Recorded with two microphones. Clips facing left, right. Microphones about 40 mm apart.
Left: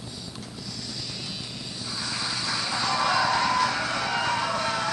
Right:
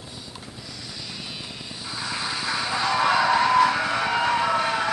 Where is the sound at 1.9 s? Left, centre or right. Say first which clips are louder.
Right 3 dB; centre.